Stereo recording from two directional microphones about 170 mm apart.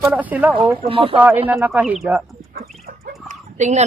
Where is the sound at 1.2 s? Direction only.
10° right (ahead or behind).